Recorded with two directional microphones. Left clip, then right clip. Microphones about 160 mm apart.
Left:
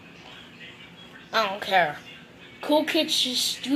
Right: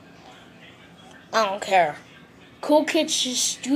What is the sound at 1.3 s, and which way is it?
A woman's voice, 20° right (ahead or behind).